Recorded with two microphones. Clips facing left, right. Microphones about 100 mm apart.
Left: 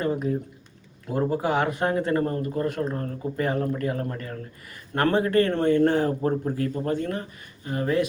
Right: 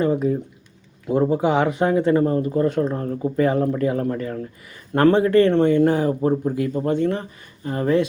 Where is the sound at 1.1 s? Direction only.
20° right (ahead or behind).